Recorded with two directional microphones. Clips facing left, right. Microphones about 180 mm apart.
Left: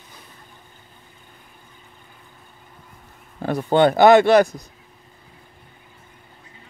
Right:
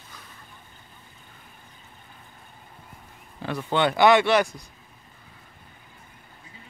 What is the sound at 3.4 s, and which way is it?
Speech, 45° left (ahead or behind).